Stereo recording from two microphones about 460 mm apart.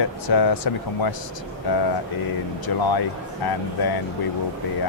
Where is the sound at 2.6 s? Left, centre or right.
Left.